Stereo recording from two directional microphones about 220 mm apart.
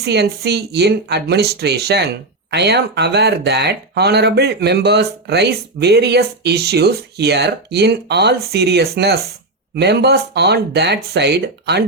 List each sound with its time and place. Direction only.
0.0 s speech: 50° right (ahead or behind)